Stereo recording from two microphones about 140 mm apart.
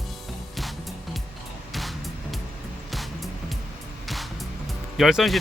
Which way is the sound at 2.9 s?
Centre (ahead or behind).